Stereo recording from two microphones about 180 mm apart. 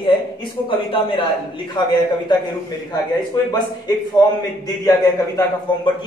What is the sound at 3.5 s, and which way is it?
A woman's voice, 20° left (ahead or behind).